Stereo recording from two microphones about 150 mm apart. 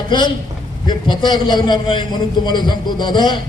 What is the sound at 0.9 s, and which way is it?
A man's voice, 30° left (ahead or behind).